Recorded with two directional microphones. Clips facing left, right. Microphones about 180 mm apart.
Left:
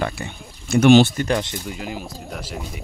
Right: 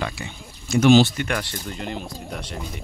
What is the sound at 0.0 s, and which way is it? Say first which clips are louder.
Speech: left 4 dB; 50° left (ahead or behind).